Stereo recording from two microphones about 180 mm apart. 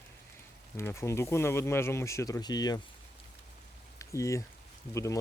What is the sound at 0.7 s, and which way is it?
Speech, 15° left (ahead or behind).